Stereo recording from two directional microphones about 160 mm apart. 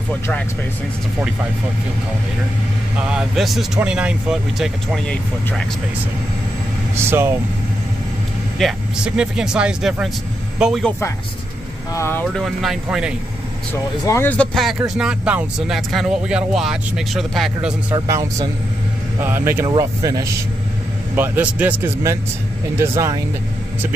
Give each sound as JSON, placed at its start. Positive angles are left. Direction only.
{"t": 3.1, "sound": "speech", "side_deg": 0}
{"t": 7.0, "sound": "speech", "side_deg": -15}
{"t": 8.5, "sound": "speech", "side_deg": -5}
{"t": 11.9, "sound": "speech", "side_deg": 15}
{"t": 12.4, "sound": "speech", "side_deg": -5}
{"t": 14.0, "sound": "speech", "side_deg": 15}
{"t": 17.9, "sound": "speech", "side_deg": -25}
{"t": 19.2, "sound": "speech", "side_deg": -15}
{"t": 21.2, "sound": "speech", "side_deg": -10}